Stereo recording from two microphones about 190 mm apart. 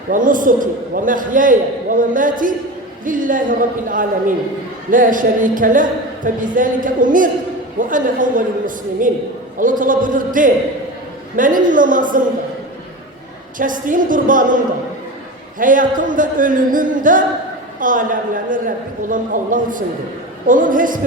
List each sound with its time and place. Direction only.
0.1 s a woman's voice: 45° right (ahead or behind)
13.6 s a woman's voice: 45° right (ahead or behind)
15.5 s a woman's voice: 45° right (ahead or behind)